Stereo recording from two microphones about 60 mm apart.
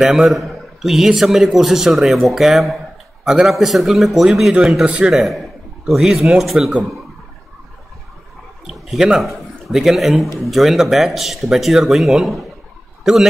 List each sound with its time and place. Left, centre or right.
0.0 s a man's voice: centre
4.8 s a man's voice: right
5.1 s a man's voice: centre
8.6 s a man's voice: centre